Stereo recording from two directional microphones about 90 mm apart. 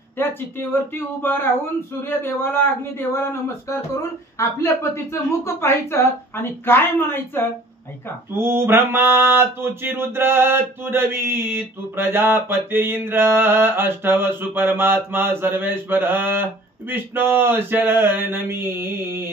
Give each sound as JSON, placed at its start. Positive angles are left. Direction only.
{"t": 0.2, "sound": "a woman's voice", "side_deg": 25}
{"t": 8.4, "sound": "mantra", "side_deg": -25}